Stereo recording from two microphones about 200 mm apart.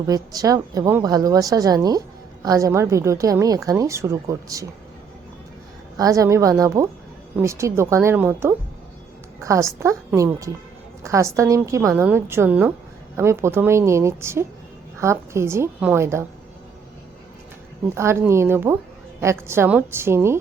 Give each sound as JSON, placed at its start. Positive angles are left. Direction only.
{"t": 0.1, "sound": "a woman's voice", "side_deg": -20}
{"t": 6.0, "sound": "a woman's voice", "side_deg": -15}
{"t": 17.9, "sound": "a woman's voice", "side_deg": -15}